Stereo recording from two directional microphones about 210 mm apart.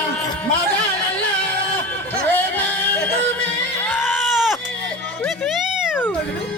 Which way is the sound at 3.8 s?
10° left (ahead or behind).